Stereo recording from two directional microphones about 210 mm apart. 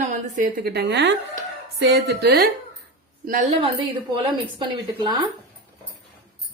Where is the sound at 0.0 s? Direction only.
40° right (ahead or behind).